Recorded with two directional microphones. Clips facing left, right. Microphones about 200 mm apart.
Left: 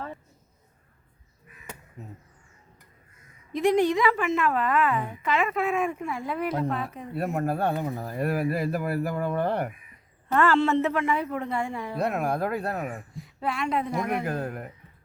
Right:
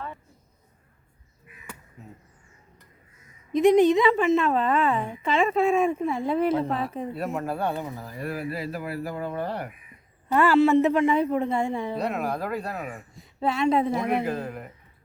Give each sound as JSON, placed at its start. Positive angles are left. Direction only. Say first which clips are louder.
{"t": 3.5, "sound": "a woman's voice", "louder": "right 5 dB", "side_deg": -20}
{"t": 7.2, "sound": "speech", "louder": "left 3 dB", "side_deg": 50}
{"t": 10.3, "sound": "a woman's voice", "louder": "right 3 dB", "side_deg": -10}
{"t": 11.9, "sound": "speech", "louder": "left 1 dB", "side_deg": 55}
{"t": 13.1, "sound": "speech", "louder": "right 6 dB", "side_deg": -25}
{"t": 14.3, "sound": "speech", "louder": "right 1 dB", "side_deg": 55}